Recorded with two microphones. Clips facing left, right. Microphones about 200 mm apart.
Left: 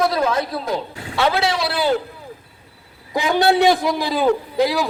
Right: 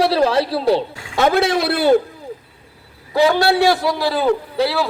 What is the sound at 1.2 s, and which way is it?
Speech, 50° right (ahead or behind).